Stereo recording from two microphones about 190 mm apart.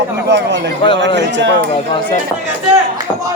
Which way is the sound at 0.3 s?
65° right (ahead or behind).